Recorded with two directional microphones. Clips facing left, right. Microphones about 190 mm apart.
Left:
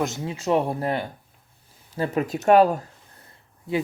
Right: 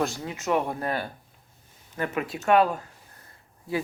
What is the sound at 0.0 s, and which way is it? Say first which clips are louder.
Speech: left 2 dB; 20° left (ahead or behind).